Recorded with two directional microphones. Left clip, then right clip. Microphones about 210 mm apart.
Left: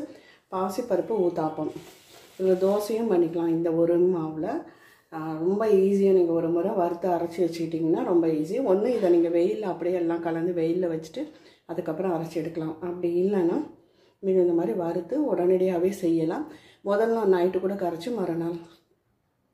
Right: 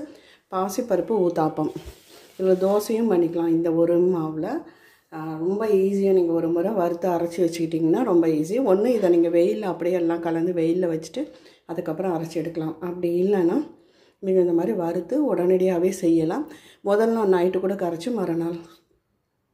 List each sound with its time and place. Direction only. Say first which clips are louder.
0.5 s speech: right 3 dB; 30° right (ahead or behind)
2.4 s speech: right 3 dB; 30° right (ahead or behind)
5.1 s speech: right 1 dB; 10° right (ahead or behind); by 18.6 s 30° right (ahead or behind)